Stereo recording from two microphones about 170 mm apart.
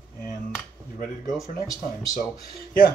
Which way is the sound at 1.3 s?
Centre (ahead or behind).